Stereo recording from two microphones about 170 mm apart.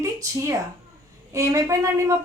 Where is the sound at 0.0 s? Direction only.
20° right (ahead or behind).